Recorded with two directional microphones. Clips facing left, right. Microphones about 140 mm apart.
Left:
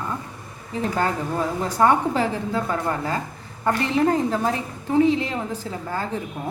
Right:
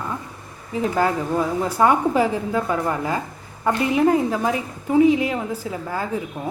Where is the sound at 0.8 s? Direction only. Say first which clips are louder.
Right 3 dB; 10° right (ahead or behind).